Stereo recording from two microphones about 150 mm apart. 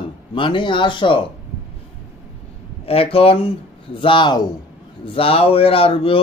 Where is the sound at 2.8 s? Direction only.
40° left (ahead or behind).